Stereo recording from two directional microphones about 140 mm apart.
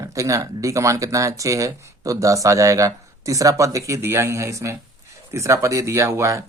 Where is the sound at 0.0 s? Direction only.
25° right (ahead or behind).